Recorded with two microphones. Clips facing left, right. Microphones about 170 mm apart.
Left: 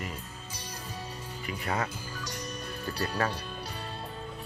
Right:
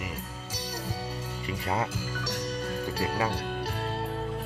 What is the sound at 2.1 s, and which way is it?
Music, 90° right.